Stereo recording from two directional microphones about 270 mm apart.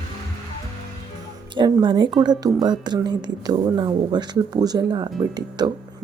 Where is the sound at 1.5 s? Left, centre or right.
Centre.